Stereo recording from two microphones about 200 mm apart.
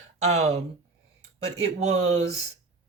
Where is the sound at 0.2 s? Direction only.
35° right (ahead or behind).